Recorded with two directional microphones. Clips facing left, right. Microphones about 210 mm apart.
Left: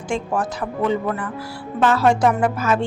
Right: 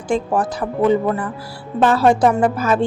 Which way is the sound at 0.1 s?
35° right (ahead or behind).